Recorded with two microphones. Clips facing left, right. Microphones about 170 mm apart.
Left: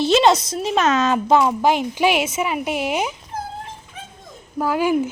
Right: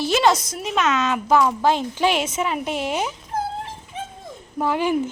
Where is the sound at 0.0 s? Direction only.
20° left (ahead or behind).